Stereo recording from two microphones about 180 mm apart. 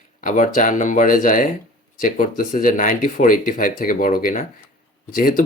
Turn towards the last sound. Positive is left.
turn(degrees=50)  # may be behind; listen again after turning